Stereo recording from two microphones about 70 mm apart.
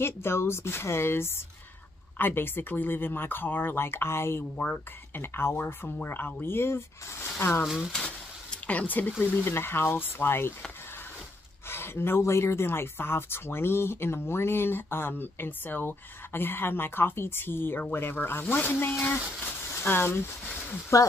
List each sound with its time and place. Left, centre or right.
0.0 s speech: left
7.6 s speech: centre
7.9 s a sound: centre
8.6 s speech: left
11.7 s speech: left
20.9 s speech: left